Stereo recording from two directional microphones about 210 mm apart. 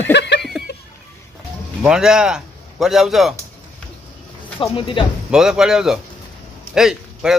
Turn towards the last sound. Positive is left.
turn(degrees=0)  # may be behind; listen again after turning